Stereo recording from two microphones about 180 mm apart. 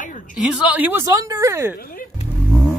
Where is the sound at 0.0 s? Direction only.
45° left (ahead or behind).